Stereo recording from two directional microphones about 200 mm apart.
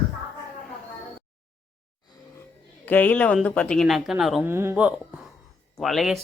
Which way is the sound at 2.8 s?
10° left (ahead or behind).